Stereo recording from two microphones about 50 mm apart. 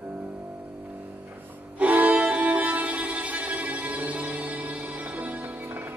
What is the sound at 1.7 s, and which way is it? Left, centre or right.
Music, right.